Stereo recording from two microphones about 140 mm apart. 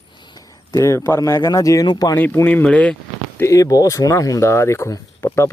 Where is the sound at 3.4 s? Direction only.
25° left (ahead or behind).